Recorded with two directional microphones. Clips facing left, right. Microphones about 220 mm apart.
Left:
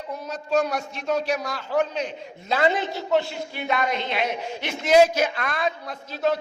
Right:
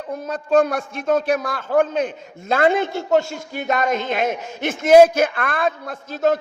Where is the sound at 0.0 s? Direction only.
55° right (ahead or behind).